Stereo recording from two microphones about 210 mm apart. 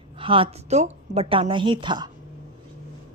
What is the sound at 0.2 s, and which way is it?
A woman's voice, 25° right (ahead or behind).